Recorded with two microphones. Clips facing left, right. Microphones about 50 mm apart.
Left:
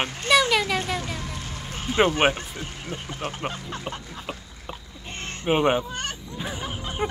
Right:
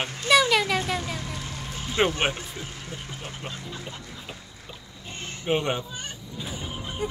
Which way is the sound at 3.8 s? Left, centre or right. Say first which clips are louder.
Left 5 dB; left.